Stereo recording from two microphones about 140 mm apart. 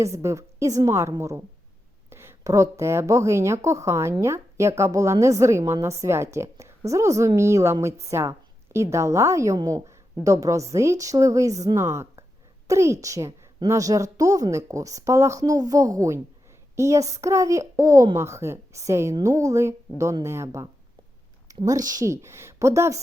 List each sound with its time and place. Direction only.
0.0 s a woman's voice: 20° right (ahead or behind)